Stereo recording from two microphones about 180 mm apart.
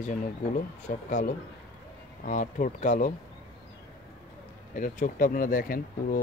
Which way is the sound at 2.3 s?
45° left (ahead or behind).